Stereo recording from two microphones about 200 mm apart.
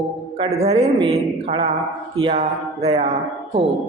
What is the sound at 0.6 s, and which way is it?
A woman's voice, 30° right (ahead or behind).